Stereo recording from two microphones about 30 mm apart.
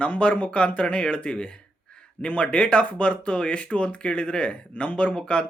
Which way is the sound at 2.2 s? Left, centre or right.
Left.